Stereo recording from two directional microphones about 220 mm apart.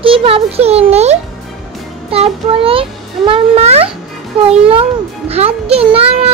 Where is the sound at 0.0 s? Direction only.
25° right (ahead or behind).